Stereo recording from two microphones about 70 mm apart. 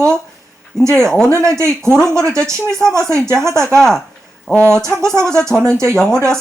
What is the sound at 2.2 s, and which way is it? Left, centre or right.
Speech, right.